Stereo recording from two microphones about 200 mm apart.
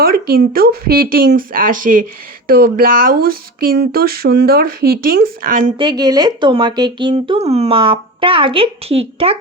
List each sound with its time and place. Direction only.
0.0 s speech: 50° right (ahead or behind)
5.7 s speech: 20° right (ahead or behind)